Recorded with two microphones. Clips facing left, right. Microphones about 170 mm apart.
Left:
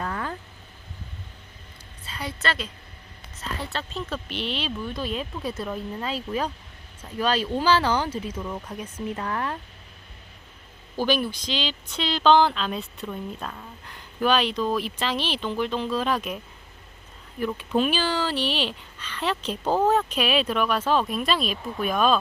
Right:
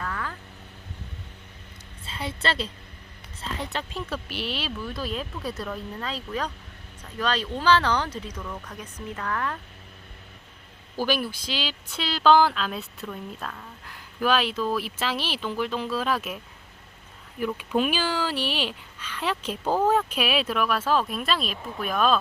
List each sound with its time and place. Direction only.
0.0 s vehicle: 30° left (ahead or behind)
2.0 s a woman's voice: 25° right (ahead or behind)
3.4 s speech: 20° right (ahead or behind); by 8.2 s 5° left (ahead or behind)
8.4 s speech: 25° left (ahead or behind)
11.0 s speech: 5° right (ahead or behind)
13.1 s speech: 10° left (ahead or behind)
13.8 s speech: 5° right (ahead or behind)
17.4 s speech: 10° right (ahead or behind)